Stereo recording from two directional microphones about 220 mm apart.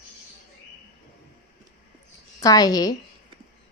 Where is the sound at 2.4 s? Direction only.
15° left (ahead or behind).